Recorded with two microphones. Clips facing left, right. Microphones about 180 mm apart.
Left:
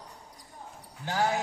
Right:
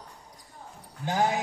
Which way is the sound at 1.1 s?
20° right (ahead or behind).